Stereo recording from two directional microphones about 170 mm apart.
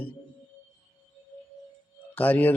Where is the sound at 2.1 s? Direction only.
10° left (ahead or behind).